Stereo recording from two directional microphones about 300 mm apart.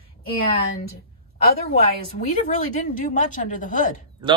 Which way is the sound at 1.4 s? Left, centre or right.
Left.